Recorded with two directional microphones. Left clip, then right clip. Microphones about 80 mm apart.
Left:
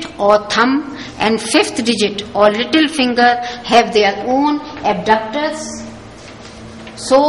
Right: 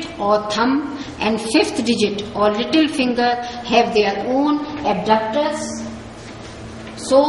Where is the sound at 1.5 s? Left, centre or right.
Left.